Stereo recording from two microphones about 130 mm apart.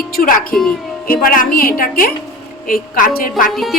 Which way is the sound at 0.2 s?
90° left.